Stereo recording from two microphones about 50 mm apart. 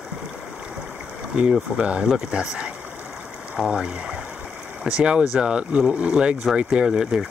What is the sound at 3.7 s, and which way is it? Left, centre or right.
Speech, centre.